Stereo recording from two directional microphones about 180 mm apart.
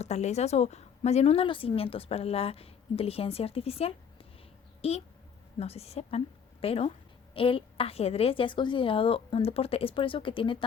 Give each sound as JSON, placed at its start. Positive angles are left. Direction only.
{"t": 0.0, "sound": "a woman's voice", "side_deg": 40}